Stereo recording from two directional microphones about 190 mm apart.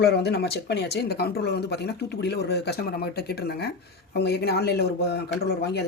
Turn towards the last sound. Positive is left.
turn(degrees=55)  # may be behind; listen again after turning